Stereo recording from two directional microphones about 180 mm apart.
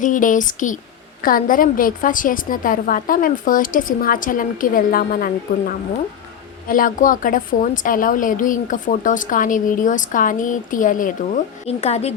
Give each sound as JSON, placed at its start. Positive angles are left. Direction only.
{"t": 0.0, "sound": "a woman's voice", "side_deg": 45}
{"t": 11.6, "sound": "a woman's voice", "side_deg": 35}